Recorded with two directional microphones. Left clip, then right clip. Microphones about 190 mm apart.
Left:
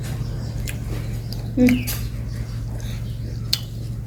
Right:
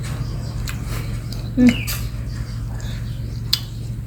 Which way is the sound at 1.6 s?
20° left (ahead or behind).